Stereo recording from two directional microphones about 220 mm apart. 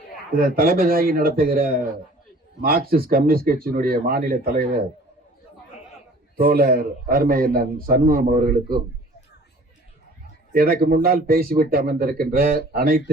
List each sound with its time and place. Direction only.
0.3 s a man's voice: 40° right (ahead or behind)
6.3 s a man's voice: 45° right (ahead or behind)
10.5 s speech: 45° right (ahead or behind)